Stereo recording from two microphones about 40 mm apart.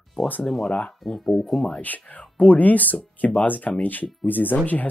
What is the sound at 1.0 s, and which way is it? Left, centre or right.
Speech, centre.